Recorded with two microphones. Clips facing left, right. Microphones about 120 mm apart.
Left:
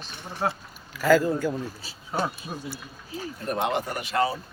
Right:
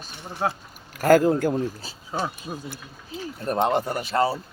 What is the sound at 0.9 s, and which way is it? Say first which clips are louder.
Speech: right 3 dB; 50° right (ahead or behind).